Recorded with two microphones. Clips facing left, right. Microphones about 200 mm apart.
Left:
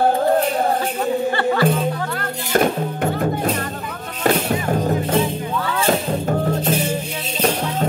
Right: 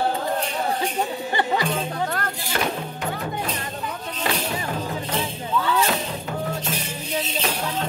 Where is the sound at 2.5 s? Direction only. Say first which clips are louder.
Left 10 dB; 50° left (ahead or behind).